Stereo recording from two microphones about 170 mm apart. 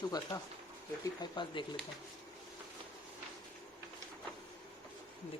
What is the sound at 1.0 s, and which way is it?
Speech, 25° left (ahead or behind).